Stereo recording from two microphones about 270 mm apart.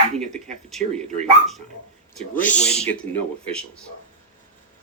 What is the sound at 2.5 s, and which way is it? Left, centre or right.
Speech, left.